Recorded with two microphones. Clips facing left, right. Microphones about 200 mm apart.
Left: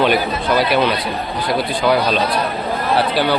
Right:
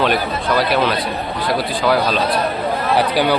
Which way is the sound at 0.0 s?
Centre (ahead or behind).